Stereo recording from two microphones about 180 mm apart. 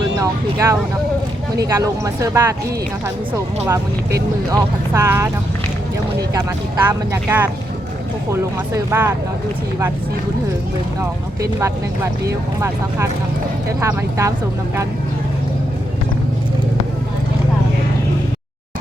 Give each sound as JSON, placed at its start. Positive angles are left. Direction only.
{"t": 0.2, "sound": "speech", "side_deg": -15}
{"t": 3.7, "sound": "speech", "side_deg": -15}
{"t": 6.3, "sound": "speech", "side_deg": -15}
{"t": 11.0, "sound": "speech", "side_deg": -15}